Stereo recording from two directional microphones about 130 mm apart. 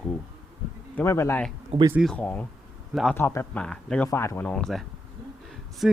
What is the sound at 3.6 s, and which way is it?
Speech, 5° left (ahead or behind).